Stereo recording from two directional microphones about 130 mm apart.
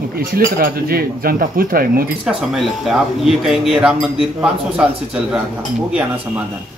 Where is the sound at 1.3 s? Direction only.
90° right.